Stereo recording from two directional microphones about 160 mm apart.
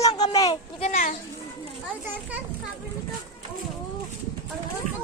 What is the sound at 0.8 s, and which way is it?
Speech, 50° left (ahead or behind).